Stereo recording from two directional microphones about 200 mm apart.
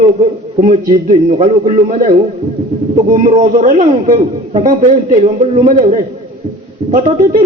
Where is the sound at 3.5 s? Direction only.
40° right (ahead or behind).